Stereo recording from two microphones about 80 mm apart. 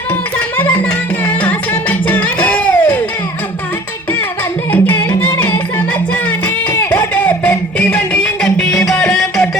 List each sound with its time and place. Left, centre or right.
0.3 s music: left
4.7 s music: left
6.7 s a sound: left
7.4 s music: centre